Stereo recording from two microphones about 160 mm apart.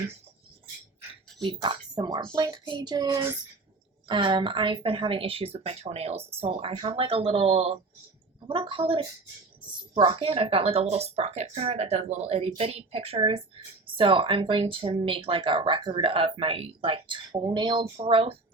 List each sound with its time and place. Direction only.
1.4 s a child's voice: 30° right (ahead or behind)